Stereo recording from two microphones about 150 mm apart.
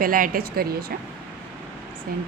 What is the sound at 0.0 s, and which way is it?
Speech, 70° right (ahead or behind).